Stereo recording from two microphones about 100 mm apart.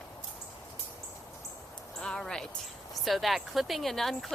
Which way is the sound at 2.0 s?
5° left (ahead or behind).